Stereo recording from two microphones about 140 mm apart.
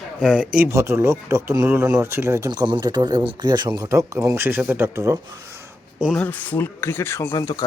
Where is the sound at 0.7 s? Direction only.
20° right (ahead or behind).